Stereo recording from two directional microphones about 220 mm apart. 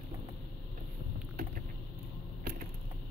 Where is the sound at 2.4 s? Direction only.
40° right (ahead or behind).